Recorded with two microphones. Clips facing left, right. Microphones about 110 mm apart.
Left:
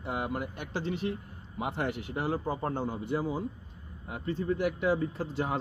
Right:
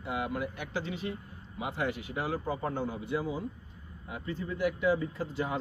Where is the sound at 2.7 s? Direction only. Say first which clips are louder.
Left 1 dB; 50° left (ahead or behind).